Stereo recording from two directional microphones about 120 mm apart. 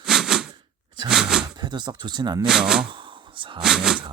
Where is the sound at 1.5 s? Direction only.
35° right (ahead or behind).